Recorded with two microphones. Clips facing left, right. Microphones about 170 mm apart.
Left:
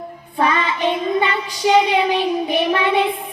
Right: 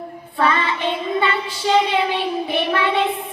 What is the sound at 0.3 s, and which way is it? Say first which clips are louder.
Child singing: left 1 dB; 15° left (ahead or behind).